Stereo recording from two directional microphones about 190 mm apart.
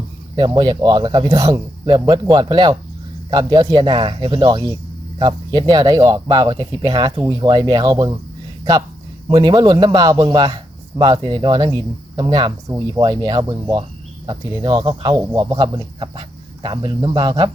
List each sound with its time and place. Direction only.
0.3 s a man's voice: 25° right (ahead or behind)
9.3 s a man's voice: 20° right (ahead or behind)